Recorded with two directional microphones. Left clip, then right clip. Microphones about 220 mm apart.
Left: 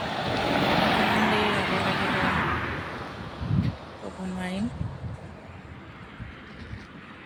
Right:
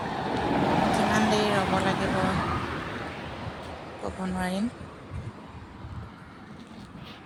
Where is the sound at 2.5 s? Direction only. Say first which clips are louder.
Left 1 dB; 45° right (ahead or behind).